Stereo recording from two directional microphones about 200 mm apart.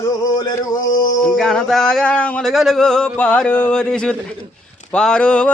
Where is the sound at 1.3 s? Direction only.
Centre (ahead or behind).